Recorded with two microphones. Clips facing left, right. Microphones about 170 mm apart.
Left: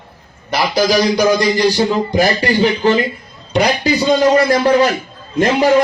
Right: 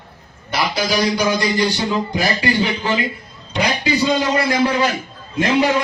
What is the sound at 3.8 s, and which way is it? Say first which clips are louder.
Speech: left 4 dB; 40° left (ahead or behind).